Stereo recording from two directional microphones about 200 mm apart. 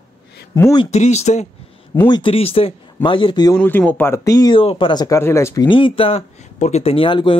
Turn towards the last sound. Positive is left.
turn(degrees=25)  # may be behind; listen again after turning